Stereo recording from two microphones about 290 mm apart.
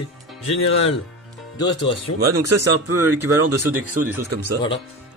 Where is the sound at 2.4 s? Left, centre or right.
Right.